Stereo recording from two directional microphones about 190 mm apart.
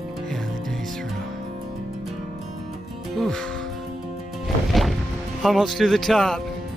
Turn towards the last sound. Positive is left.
turn(degrees=0)  # may be behind; listen again after turning